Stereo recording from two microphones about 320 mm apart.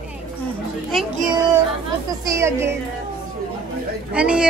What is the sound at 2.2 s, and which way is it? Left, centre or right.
Speech, centre.